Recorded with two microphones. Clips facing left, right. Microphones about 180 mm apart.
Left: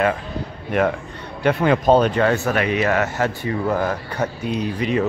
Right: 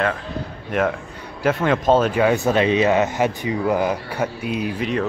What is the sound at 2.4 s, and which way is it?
Speech, 20° right (ahead or behind).